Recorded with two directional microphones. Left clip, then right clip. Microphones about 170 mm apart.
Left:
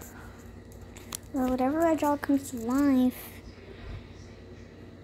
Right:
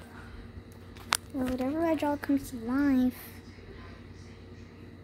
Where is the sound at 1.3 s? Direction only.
25° left (ahead or behind).